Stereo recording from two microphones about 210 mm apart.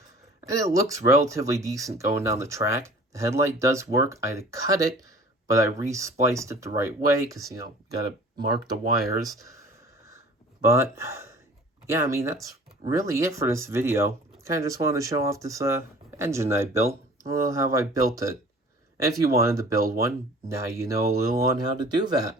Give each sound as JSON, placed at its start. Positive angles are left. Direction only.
{"t": 0.4, "sound": "speech", "side_deg": -15}
{"t": 9.4, "sound": "a sound", "side_deg": -15}
{"t": 10.6, "sound": "speech", "side_deg": -15}